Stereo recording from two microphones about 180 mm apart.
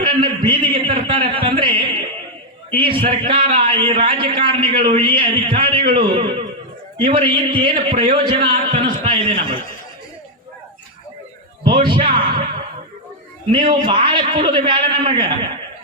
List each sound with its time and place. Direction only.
0.0 s a man's voice: 30° right (ahead or behind)
1.3 s music: 30° right (ahead or behind)
2.7 s a man's voice: 30° right (ahead or behind)
11.6 s a man's voice: 25° right (ahead or behind)
13.5 s a man's voice: 30° right (ahead or behind)